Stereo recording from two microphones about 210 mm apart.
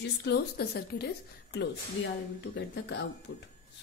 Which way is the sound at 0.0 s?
55° left (ahead or behind).